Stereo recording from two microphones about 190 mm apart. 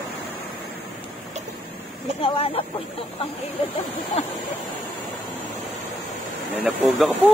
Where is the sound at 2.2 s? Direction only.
30° left (ahead or behind).